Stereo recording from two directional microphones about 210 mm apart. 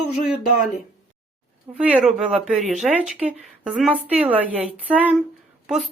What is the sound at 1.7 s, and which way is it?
A woman's voice, 5° right (ahead or behind).